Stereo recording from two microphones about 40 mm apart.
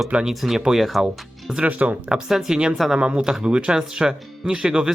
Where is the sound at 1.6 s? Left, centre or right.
Right.